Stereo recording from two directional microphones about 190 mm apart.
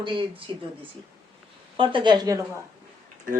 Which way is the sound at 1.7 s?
25° right (ahead or behind).